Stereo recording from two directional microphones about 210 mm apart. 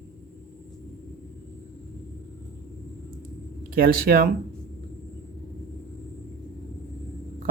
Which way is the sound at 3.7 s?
45° right (ahead or behind).